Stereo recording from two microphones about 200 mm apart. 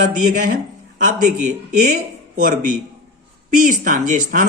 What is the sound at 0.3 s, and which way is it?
Speech, 40° right (ahead or behind).